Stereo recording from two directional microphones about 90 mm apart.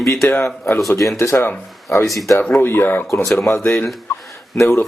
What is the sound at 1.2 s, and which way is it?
Speech, 30° left (ahead or behind).